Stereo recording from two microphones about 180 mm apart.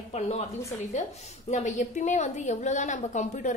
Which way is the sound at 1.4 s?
40° left (ahead or behind).